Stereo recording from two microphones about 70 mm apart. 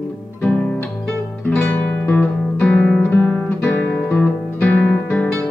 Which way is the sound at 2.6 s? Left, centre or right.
Centre.